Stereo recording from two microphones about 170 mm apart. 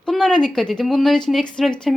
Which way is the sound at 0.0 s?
Centre (ahead or behind).